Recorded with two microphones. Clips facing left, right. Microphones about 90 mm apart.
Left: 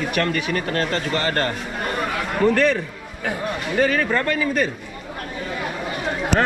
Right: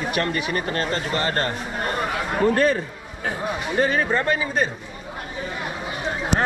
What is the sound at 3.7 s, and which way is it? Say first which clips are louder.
Speech: left 1 dB; 25° right (ahead or behind).